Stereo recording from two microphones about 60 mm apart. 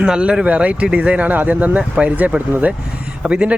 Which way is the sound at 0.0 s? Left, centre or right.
Centre.